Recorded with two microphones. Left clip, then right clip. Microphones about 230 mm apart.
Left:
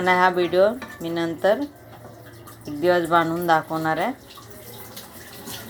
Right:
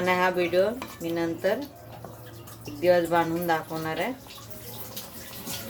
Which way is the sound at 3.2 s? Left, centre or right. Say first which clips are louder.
Left 6 dB; centre.